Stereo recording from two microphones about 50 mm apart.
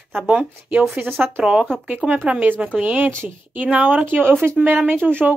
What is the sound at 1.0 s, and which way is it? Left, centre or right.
Speech, right.